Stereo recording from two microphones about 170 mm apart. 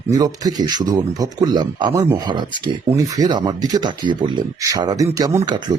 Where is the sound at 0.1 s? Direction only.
20° right (ahead or behind).